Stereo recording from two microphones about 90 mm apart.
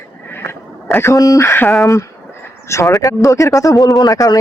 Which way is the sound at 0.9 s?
30° left (ahead or behind).